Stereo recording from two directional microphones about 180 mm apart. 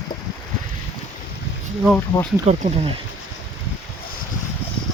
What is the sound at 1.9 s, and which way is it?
Speech, 10° left (ahead or behind).